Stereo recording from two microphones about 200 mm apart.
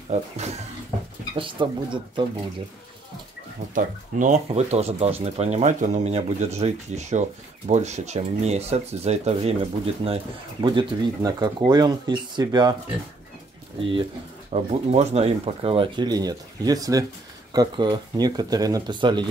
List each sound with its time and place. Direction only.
1.3 s speech: 25° right (ahead or behind)
3.7 s speech: 40° right (ahead or behind); by 12.7 s 20° right (ahead or behind)
13.7 s speech: 25° right (ahead or behind)